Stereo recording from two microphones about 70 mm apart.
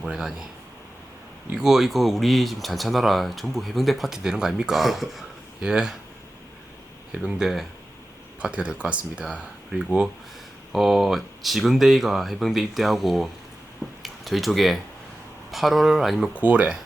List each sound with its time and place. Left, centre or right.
0.0 s speech: centre
1.5 s speech: centre
7.1 s speech: centre
8.4 s speech: centre
16.3 s speech: centre